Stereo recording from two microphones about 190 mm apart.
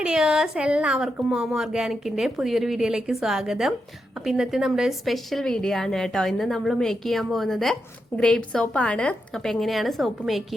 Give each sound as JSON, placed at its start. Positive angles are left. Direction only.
{"t": 0.0, "sound": "speech", "side_deg": -5}